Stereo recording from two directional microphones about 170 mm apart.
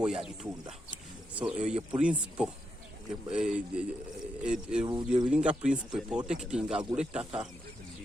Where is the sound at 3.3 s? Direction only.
5° right (ahead or behind).